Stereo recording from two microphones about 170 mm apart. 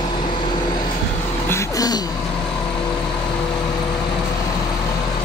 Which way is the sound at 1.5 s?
20° left (ahead or behind).